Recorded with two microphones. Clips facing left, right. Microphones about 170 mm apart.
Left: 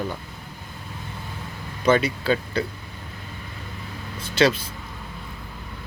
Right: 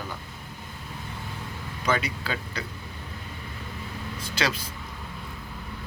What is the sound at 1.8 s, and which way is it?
Speech, 30° left (ahead or behind).